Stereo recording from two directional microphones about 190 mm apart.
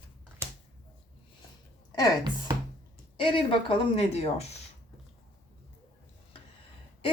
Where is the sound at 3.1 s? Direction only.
25° left (ahead or behind).